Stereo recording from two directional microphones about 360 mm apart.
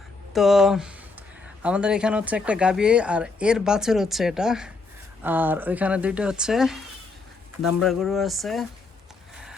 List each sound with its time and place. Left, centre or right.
0.3 s speech: centre